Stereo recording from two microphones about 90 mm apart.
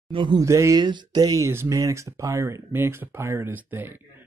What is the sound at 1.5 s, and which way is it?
Speech, 30° right (ahead or behind).